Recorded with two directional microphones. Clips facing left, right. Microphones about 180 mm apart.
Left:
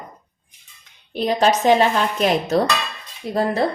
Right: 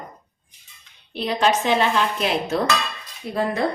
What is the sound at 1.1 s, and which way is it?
A woman's voice, 45° left (ahead or behind).